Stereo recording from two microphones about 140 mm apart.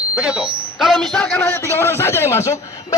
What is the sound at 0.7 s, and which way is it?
Speech, centre (ahead or behind).